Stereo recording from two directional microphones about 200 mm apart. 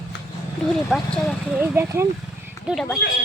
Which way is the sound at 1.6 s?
10° right (ahead or behind).